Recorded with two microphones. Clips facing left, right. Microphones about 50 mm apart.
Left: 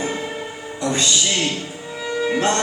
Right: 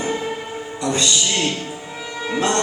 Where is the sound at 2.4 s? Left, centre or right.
Left.